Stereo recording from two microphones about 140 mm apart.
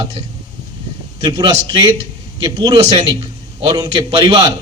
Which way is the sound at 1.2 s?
30° right (ahead or behind).